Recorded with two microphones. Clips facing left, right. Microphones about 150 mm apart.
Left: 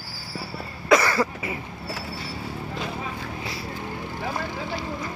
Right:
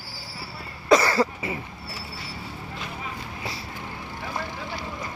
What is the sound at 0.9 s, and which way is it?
Cough, 30° right (ahead or behind).